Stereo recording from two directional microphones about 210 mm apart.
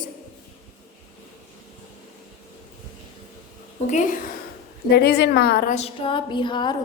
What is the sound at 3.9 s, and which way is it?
Speech, 35° left (ahead or behind).